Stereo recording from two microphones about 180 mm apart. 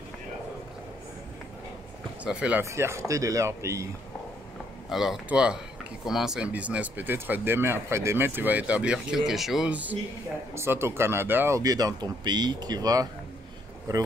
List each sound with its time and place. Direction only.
2.2 s speech: 5° right (ahead or behind)
4.8 s speech: centre (ahead or behind); by 13.1 s 20° right (ahead or behind)